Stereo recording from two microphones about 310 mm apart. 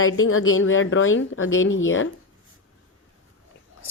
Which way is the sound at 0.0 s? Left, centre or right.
Left.